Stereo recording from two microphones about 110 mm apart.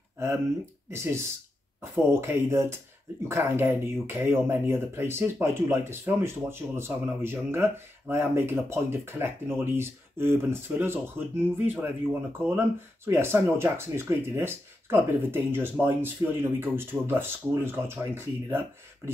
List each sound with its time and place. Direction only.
0.8 s speech: 25° right (ahead or behind)